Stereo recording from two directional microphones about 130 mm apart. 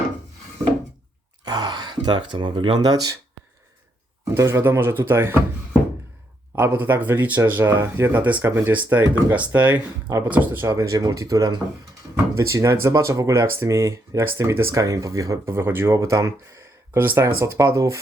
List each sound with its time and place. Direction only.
1.5 s speech: 35° right (ahead or behind)
4.4 s speech: 20° right (ahead or behind)
6.6 s speech: 15° right (ahead or behind)